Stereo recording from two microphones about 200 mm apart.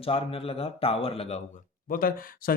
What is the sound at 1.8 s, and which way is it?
Speech, 45° left (ahead or behind).